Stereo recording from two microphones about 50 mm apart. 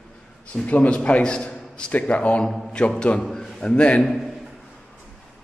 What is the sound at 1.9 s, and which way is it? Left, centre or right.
A man's voice, left.